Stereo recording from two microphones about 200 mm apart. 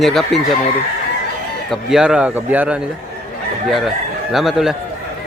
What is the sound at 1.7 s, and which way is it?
Speech, 5° right (ahead or behind).